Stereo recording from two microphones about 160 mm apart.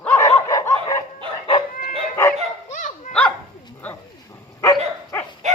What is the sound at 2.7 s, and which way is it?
Dog, 55° left (ahead or behind).